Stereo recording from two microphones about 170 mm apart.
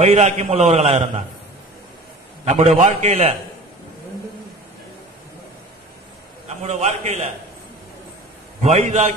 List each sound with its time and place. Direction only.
0.0 s a man's voice: 40° right (ahead or behind)
2.4 s a man's voice: 40° right (ahead or behind)
6.6 s a man's voice: 40° right (ahead or behind)
8.6 s a man's voice: 40° right (ahead or behind)